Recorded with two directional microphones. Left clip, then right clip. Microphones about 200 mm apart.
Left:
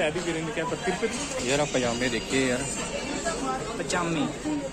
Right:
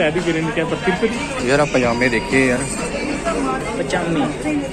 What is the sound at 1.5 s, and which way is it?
Speech, 10° left (ahead or behind).